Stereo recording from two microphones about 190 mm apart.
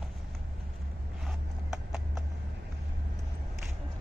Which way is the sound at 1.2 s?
5° right (ahead or behind).